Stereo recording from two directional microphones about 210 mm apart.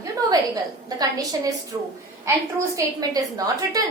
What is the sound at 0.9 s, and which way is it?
A woman's voice, 20° right (ahead or behind).